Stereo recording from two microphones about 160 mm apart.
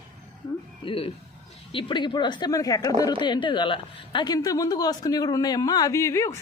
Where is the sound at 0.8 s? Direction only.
35° left (ahead or behind).